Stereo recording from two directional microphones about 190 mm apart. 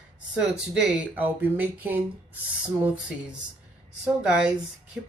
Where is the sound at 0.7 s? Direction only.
5° right (ahead or behind).